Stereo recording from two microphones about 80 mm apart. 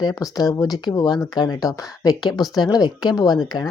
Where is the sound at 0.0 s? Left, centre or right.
Left.